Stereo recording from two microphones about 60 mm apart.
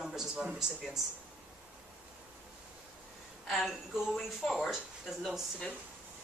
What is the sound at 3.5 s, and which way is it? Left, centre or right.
A woman's voice, centre.